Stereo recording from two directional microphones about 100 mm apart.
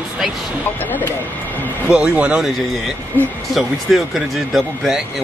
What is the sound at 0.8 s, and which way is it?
Speech, 20° left (ahead or behind).